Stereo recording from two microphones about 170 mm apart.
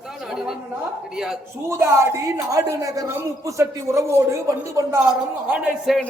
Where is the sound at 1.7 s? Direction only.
15° right (ahead or behind).